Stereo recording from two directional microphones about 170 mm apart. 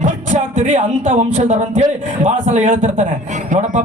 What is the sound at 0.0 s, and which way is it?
A man's voice, 45° right (ahead or behind).